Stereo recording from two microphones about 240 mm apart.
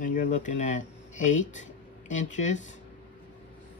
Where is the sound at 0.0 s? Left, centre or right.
Left.